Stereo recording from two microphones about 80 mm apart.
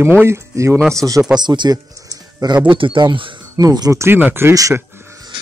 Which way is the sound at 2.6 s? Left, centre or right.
Right.